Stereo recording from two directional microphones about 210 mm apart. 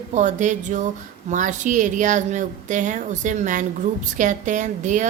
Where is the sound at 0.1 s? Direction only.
35° right (ahead or behind).